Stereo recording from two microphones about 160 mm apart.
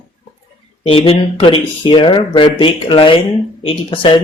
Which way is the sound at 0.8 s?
35° left (ahead or behind).